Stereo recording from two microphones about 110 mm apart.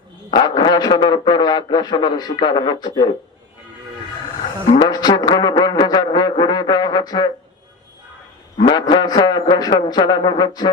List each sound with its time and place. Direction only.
0.3 s a man's voice: 40° left (ahead or behind)
4.8 s brass instrument: 35° left (ahead or behind)
8.5 s a man's voice: 45° left (ahead or behind)